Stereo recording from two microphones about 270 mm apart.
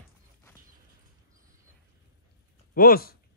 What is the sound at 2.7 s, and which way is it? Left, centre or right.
Speech, left.